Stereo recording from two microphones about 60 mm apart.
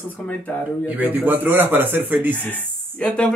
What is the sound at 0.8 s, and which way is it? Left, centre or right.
Speech, right.